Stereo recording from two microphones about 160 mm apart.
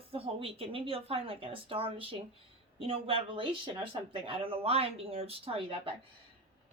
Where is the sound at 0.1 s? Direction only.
35° right (ahead or behind).